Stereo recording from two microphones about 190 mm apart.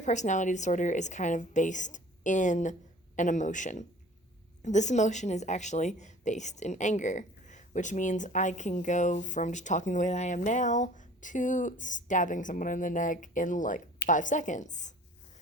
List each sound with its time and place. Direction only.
0.0 s a woman's voice: 40° left (ahead or behind)